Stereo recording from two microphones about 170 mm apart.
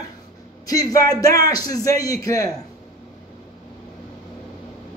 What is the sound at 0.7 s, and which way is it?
A man's voice, 20° left (ahead or behind).